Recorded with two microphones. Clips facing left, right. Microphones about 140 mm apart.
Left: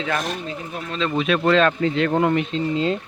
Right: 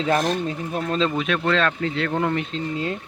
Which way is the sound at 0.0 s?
35° right (ahead or behind).